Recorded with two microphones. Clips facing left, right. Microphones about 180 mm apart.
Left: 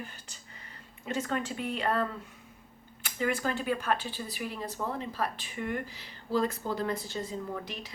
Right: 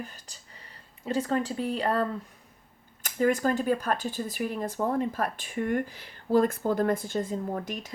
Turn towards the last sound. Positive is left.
turn(degrees=-45)  # may be behind; listen again after turning